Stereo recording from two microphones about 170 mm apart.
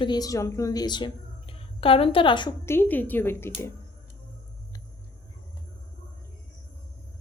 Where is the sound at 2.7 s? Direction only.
10° left (ahead or behind).